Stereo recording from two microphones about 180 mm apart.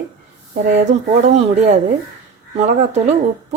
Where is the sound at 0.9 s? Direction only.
40° right (ahead or behind).